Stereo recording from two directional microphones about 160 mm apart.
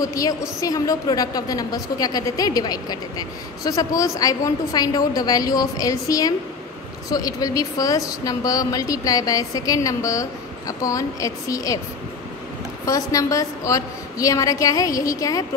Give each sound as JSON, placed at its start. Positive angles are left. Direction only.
{"t": 0.0, "sound": "a woman's voice", "side_deg": 20}
{"t": 12.8, "sound": "a woman's voice", "side_deg": 20}